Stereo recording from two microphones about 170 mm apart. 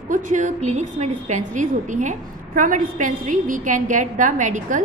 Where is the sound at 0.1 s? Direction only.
50° right (ahead or behind).